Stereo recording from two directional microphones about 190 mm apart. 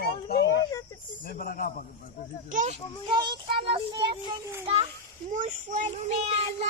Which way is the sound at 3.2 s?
25° right (ahead or behind).